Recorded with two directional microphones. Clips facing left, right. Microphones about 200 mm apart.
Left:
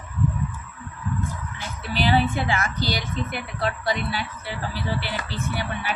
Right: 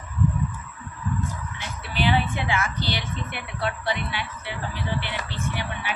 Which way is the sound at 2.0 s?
40° left (ahead or behind).